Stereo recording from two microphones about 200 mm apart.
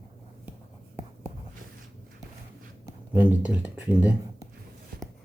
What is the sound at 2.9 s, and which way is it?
Speech, 5° right (ahead or behind).